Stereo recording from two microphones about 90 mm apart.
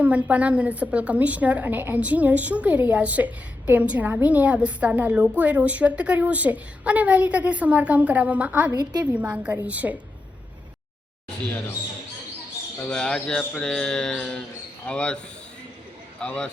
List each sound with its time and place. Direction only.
0.0 s a woman's voice: 15° right (ahead or behind)
8.8 s a woman's voice: 50° right (ahead or behind)
9.1 s a woman's voice: 15° right (ahead or behind)
12.9 s speech: 10° left (ahead or behind)
16.2 s speech: 10° left (ahead or behind)